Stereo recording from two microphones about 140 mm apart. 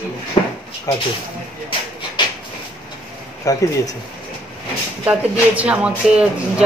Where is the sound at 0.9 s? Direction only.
25° left (ahead or behind).